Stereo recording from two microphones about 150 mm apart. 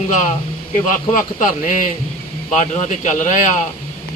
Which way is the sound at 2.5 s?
50° left (ahead or behind).